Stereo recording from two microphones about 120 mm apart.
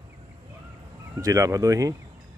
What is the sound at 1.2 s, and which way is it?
Speech, 25° right (ahead or behind).